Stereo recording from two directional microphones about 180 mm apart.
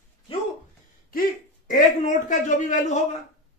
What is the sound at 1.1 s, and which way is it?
A man's voice, 50° left (ahead or behind).